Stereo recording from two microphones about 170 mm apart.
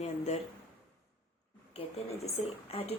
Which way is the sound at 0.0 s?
40° left (ahead or behind).